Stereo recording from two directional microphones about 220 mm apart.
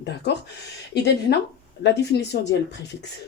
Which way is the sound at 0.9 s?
50° left (ahead or behind).